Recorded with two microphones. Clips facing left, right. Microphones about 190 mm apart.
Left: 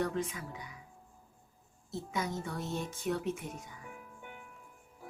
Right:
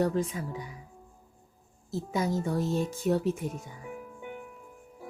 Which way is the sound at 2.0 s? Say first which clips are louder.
Right 7 dB; 35° right (ahead or behind).